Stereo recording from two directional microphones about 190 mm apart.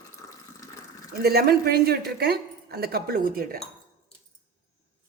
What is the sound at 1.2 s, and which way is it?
Speech, 55° right (ahead or behind).